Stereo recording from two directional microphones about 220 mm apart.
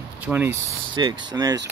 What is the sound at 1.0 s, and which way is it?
Speech, 20° right (ahead or behind).